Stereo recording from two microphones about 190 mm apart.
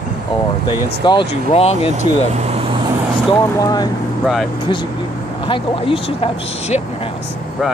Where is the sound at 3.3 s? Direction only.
20° left (ahead or behind).